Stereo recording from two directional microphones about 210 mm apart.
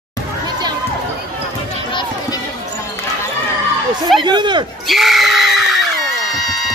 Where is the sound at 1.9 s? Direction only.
20° left (ahead or behind).